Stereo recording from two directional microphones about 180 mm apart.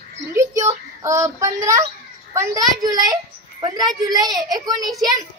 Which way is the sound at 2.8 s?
20° right (ahead or behind).